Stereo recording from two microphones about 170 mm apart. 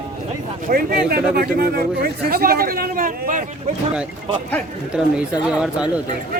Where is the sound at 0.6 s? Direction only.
60° right (ahead or behind).